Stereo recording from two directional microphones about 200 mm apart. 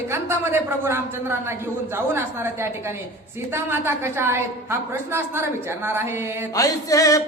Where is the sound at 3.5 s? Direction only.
10° right (ahead or behind).